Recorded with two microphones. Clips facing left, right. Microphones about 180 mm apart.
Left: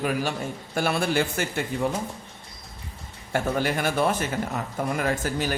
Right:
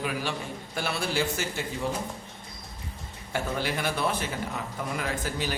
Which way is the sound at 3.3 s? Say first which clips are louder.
Left 5 dB; 50° left (ahead or behind).